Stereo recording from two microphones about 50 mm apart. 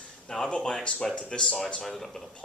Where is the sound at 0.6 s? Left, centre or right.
Centre.